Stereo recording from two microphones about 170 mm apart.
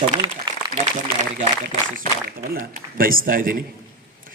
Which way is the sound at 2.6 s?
55° right (ahead or behind).